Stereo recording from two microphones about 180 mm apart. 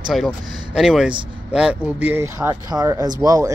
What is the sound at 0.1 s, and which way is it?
Speech, centre (ahead or behind).